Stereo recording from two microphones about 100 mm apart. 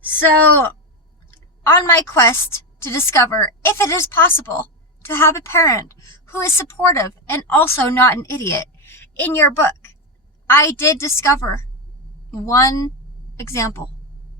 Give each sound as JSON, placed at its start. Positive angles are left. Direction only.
{"t": 0.2, "sound": "a woman's voice", "side_deg": 20}